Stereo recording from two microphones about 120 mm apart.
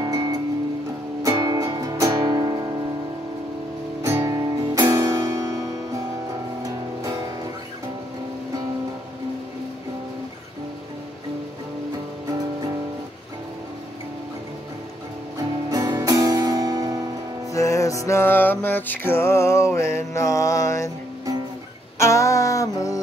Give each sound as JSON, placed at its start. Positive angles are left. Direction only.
{"t": 0.0, "sound": "music", "side_deg": -35}
{"t": 4.0, "sound": "music", "side_deg": -20}
{"t": 6.6, "sound": "music", "side_deg": -30}
{"t": 15.3, "sound": "music", "side_deg": -30}
{"t": 17.5, "sound": "music", "side_deg": 25}
{"t": 21.9, "sound": "music", "side_deg": 25}